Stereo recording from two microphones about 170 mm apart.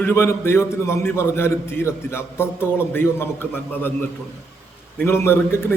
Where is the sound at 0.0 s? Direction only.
15° left (ahead or behind).